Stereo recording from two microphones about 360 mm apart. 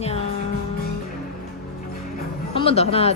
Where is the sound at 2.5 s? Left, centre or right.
Centre.